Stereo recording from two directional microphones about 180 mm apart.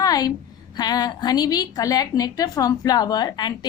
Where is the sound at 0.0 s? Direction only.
20° left (ahead or behind).